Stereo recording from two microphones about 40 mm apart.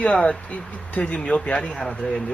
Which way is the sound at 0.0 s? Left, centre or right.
Left.